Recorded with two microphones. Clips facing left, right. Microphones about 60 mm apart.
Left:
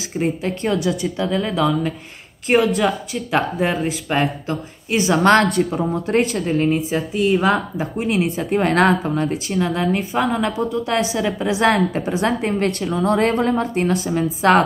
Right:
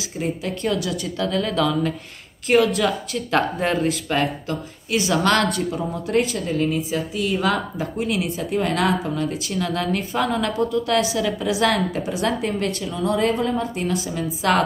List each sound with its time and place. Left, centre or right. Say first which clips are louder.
0.2 s a woman's voice: left 3 dB; left
1.2 s speech: left 1 dB; centre
2.4 s a woman's voice: left 1 dB; left
2.8 s speech: left 2 dB; centre
4.1 s a woman's voice: left 2 dB; left
5.4 s a woman's voice: left 4 dB; left
8.5 s a woman's voice: left 5 dB; left
9.5 s a woman's voice: left 4 dB; left
12.6 s a woman's voice: left 4 dB; left